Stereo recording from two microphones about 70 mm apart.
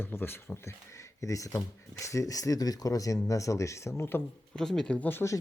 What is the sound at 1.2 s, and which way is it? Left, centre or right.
Speech, left.